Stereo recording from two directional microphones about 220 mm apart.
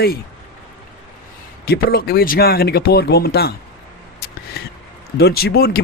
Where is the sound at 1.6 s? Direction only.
45° left (ahead or behind).